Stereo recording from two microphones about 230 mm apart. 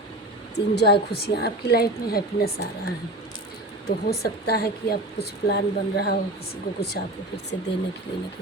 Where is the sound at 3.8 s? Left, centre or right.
Left.